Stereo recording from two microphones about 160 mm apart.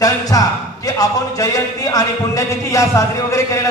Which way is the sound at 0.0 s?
20° left (ahead or behind).